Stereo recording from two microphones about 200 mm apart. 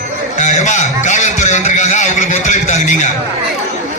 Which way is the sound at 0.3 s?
35° left (ahead or behind).